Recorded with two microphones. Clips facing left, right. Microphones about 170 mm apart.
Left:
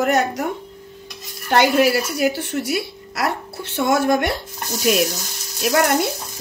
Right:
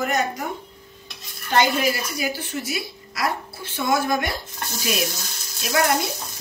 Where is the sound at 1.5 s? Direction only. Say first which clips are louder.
Left 5 dB; 70° left (ahead or behind).